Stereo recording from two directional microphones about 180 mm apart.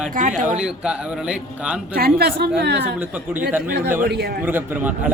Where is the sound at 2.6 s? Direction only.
70° right (ahead or behind).